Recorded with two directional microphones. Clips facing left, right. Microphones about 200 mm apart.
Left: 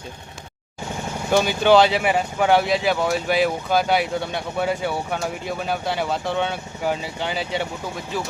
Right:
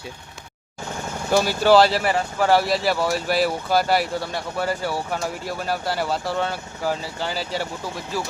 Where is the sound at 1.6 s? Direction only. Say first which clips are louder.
Even; 5° right (ahead or behind).